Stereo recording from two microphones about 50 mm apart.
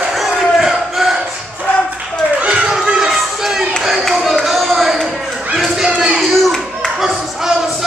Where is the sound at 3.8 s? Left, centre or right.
Centre.